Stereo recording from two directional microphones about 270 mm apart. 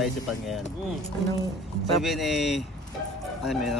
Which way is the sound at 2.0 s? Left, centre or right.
Centre.